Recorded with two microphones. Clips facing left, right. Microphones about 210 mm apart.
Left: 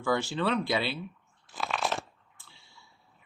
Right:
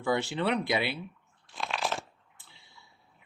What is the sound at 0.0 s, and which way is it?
Speech, 20° right (ahead or behind).